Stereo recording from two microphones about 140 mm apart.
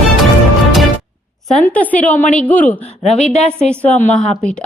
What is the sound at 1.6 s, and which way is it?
A woman's voice, 10° left (ahead or behind).